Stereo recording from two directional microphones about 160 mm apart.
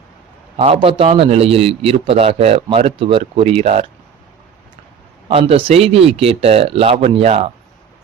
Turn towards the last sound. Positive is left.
turn(degrees=-40)  # may be behind; listen again after turning